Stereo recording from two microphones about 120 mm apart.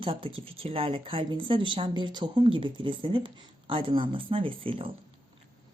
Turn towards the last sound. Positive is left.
turn(degrees=-50)  # may be behind; listen again after turning